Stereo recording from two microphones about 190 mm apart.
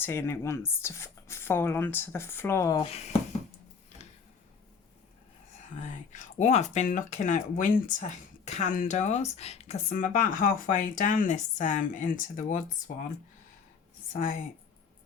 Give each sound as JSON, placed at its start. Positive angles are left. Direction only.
{"t": 0.0, "sound": "speech", "side_deg": 15}
{"t": 2.8, "sound": "speech", "side_deg": 30}
{"t": 5.9, "sound": "speech", "side_deg": 40}
{"t": 14.1, "sound": "speech", "side_deg": 45}